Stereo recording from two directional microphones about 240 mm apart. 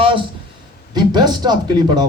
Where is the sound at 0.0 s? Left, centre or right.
Right.